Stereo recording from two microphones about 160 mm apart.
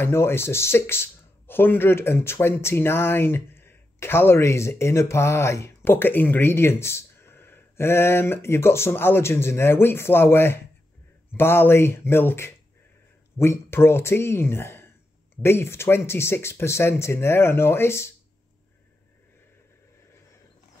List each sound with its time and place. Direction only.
0.0 s speech: 15° left (ahead or behind)